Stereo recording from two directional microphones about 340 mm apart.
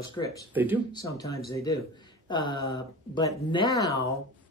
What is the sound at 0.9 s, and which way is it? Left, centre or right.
Speech, centre.